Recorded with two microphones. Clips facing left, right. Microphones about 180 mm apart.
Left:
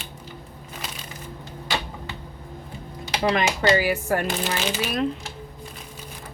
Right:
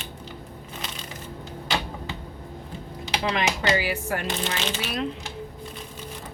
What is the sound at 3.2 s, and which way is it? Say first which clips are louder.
Speech: left 5 dB; 45° left (ahead or behind).